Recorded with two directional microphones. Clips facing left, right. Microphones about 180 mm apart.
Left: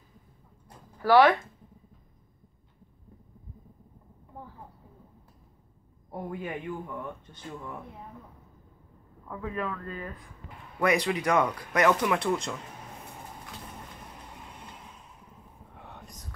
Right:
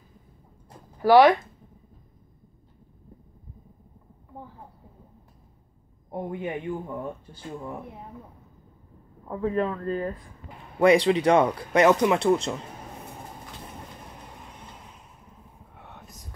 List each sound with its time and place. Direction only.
1.0 s speech: 15° right (ahead or behind)
6.0 s speech: 25° right (ahead or behind)
9.3 s speech: 30° right (ahead or behind)
15.7 s whispering: centre (ahead or behind)